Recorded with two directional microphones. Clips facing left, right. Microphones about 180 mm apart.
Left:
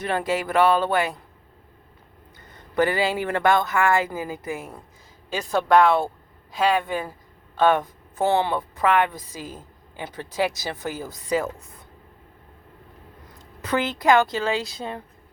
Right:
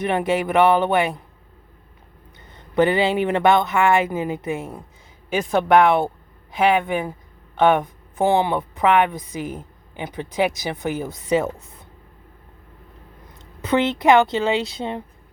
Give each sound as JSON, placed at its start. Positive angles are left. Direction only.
{"t": 0.0, "sound": "speech", "side_deg": -20}
{"t": 2.7, "sound": "speech", "side_deg": -20}
{"t": 13.4, "sound": "speech", "side_deg": -25}